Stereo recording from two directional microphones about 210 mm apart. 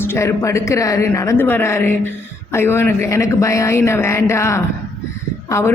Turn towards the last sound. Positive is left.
turn(degrees=10)  # may be behind; listen again after turning